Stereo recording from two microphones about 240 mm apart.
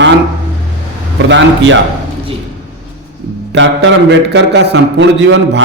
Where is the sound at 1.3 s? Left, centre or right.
Right.